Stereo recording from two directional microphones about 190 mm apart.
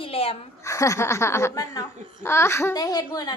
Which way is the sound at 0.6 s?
15° left (ahead or behind).